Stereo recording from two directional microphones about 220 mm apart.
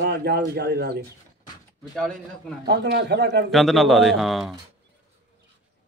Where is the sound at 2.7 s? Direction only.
50° right (ahead or behind).